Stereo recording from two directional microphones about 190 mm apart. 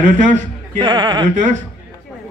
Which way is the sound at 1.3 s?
40° right (ahead or behind).